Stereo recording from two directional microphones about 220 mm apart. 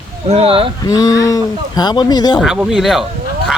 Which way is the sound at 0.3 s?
25° right (ahead or behind).